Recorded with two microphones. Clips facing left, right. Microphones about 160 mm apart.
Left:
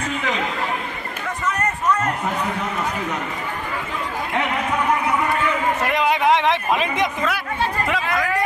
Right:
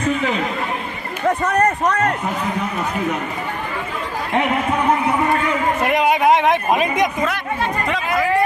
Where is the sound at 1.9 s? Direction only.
65° right (ahead or behind).